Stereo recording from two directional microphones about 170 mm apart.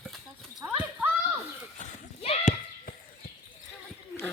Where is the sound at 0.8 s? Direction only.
10° right (ahead or behind).